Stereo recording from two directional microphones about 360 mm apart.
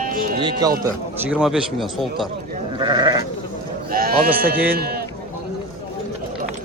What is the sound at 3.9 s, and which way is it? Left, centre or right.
Speech, right.